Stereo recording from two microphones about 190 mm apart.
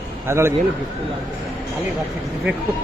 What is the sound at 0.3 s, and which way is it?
Speech, 15° right (ahead or behind).